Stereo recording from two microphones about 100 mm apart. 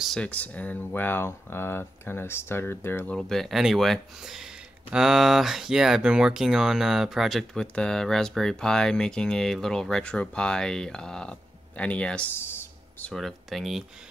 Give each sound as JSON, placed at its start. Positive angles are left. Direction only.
{"t": 0.2, "sound": "speech", "side_deg": 15}
{"t": 3.2, "sound": "speech", "side_deg": 5}
{"t": 7.6, "sound": "speech", "side_deg": 10}
{"t": 13.1, "sound": "speech", "side_deg": 0}